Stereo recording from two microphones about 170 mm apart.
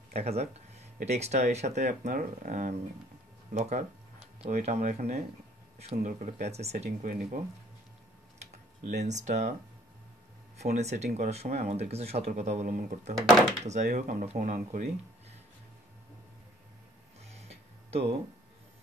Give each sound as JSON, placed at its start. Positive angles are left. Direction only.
{"t": 0.1, "sound": "speech", "side_deg": -40}
{"t": 7.1, "sound": "speech", "side_deg": -55}
{"t": 8.4, "sound": "typing", "side_deg": -45}
{"t": 10.6, "sound": "speech", "side_deg": -40}
{"t": 17.3, "sound": "tick-tock", "side_deg": -40}